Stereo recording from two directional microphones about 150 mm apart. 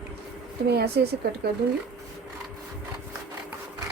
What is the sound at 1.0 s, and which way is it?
Speech, 90° right.